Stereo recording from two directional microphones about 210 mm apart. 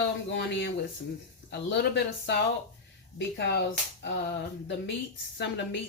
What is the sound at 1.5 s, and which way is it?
Speech, 55° left (ahead or behind).